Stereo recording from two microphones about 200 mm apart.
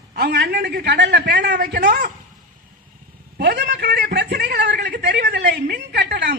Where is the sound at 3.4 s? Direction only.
55° right (ahead or behind).